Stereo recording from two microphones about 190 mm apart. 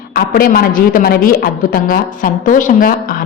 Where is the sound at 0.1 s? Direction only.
50° left (ahead or behind).